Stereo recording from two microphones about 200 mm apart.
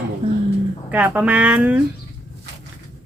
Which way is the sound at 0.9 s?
5° right (ahead or behind).